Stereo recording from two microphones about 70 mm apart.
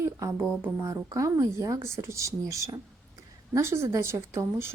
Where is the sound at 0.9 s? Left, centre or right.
Right.